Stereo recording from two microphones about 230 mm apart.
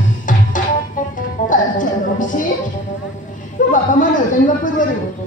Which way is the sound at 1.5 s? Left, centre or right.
Left.